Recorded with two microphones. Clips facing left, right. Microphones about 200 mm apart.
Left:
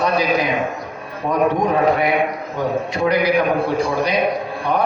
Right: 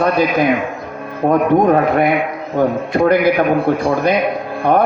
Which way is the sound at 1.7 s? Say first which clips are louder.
Right 4 dB; 55° right (ahead or behind).